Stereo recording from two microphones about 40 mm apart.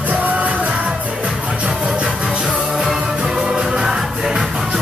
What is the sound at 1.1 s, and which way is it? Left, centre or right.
Music, right.